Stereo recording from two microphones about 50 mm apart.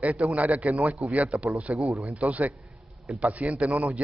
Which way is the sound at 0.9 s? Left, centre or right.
Centre.